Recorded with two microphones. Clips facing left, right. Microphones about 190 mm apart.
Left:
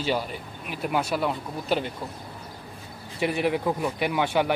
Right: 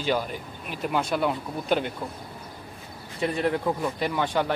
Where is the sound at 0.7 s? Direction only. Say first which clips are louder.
Even; 5° left (ahead or behind).